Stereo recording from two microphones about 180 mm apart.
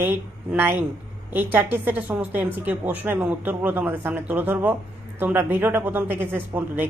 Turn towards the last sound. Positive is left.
turn(degrees=-10)  # may be behind; listen again after turning